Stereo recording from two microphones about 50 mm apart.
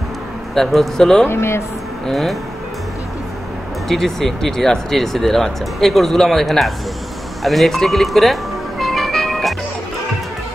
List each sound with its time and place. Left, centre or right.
0.6 s a man's voice: centre
1.2 s speech: left
2.0 s speech: centre
3.9 s speech: centre
7.4 s music: centre